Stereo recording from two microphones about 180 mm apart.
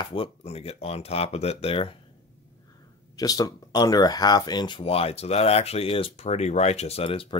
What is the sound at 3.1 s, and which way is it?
Speech, 20° left (ahead or behind).